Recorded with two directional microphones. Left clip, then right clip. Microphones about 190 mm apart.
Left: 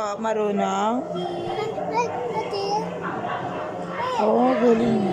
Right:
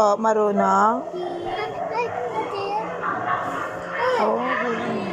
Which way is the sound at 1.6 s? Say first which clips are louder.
Left 2 dB; 20° left (ahead or behind).